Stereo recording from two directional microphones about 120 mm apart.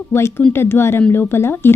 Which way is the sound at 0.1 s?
20° left (ahead or behind).